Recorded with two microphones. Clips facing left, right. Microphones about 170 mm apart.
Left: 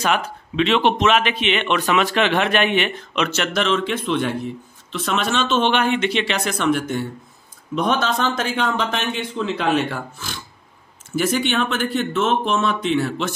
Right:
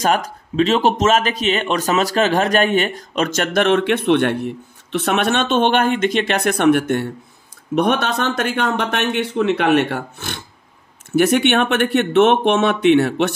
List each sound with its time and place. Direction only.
0.0 s a man's voice: 40° right (ahead or behind); by 13.3 s 65° right (ahead or behind)